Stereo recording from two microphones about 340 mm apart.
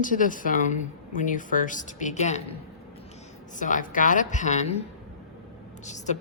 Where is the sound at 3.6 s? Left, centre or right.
Left.